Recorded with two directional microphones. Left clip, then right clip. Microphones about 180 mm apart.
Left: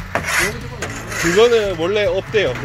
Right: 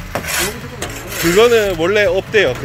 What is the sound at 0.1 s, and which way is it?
Filing, 40° right (ahead or behind).